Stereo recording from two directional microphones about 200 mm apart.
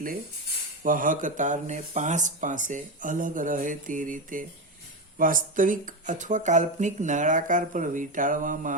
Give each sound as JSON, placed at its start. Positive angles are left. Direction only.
{"t": 0.8, "sound": "speech", "side_deg": -45}